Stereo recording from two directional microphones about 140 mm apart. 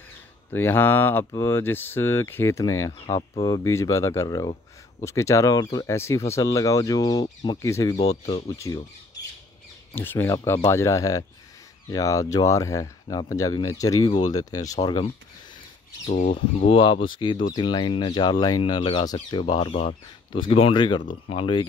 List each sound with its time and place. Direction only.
0.5 s speech: 15° left (ahead or behind)
3.2 s speech: 35° left (ahead or behind)
3.6 s speech: 20° left (ahead or behind)
8.1 s speech: 50° left (ahead or behind)
8.5 s speech: 25° left (ahead or behind)
16.1 s speech: 60° left (ahead or behind); by 21.6 s 40° left (ahead or behind)